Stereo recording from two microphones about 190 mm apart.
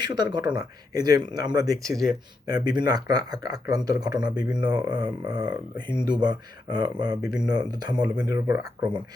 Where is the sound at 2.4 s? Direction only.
20° right (ahead or behind).